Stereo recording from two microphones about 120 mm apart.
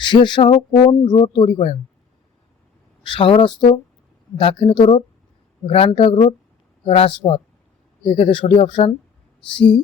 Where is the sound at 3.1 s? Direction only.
40° left (ahead or behind).